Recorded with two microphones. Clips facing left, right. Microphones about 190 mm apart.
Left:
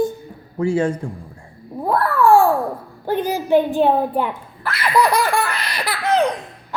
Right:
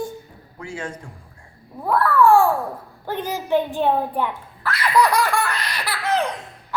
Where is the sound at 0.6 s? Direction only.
30° left (ahead or behind).